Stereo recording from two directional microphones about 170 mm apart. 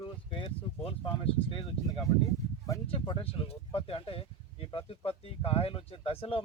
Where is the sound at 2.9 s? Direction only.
30° left (ahead or behind).